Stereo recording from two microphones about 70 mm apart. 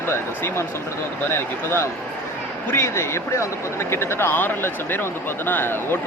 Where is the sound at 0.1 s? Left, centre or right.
Left.